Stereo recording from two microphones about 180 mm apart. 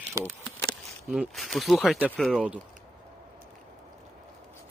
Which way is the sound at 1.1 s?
Centre (ahead or behind).